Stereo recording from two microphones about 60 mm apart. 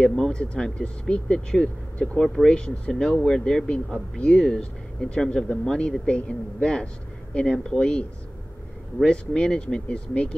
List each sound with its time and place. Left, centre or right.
0.0 s speech: centre
2.5 s speech: centre